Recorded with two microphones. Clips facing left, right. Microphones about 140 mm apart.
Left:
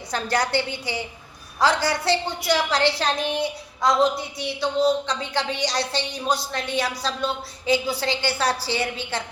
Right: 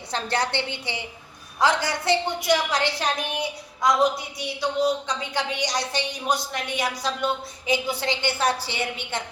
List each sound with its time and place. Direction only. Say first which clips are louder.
0.1 s a woman's voice: left 3 dB; 25° right (ahead or behind)